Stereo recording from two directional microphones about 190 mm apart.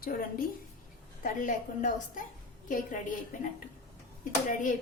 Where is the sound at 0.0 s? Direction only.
50° left (ahead or behind).